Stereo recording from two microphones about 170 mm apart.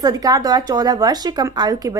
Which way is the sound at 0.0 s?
20° right (ahead or behind).